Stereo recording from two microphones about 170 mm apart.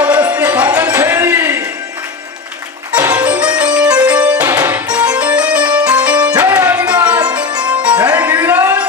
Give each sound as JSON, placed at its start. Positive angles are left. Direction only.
{"t": 0.0, "sound": "music", "side_deg": -10}
{"t": 3.1, "sound": "music", "side_deg": -10}
{"t": 5.2, "sound": "music", "side_deg": -5}
{"t": 7.4, "sound": "music", "side_deg": -25}
{"t": 8.3, "sound": "a sound", "side_deg": -10}